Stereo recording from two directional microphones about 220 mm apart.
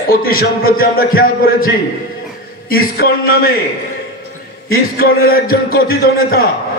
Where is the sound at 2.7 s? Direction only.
40° left (ahead or behind).